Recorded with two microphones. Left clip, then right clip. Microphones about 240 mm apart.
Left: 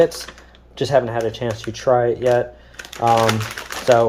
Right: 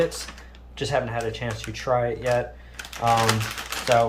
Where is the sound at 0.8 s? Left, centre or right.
Left.